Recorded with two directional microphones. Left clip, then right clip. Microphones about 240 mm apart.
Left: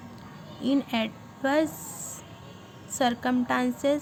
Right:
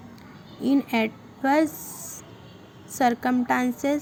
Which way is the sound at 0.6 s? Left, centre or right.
Centre.